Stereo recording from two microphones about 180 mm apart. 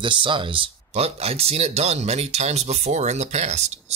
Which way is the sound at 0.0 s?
25° right (ahead or behind).